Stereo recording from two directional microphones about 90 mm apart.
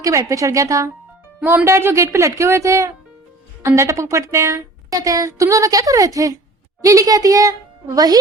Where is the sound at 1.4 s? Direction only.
30° right (ahead or behind).